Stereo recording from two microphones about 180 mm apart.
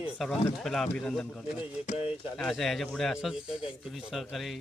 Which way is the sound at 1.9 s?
35° left (ahead or behind).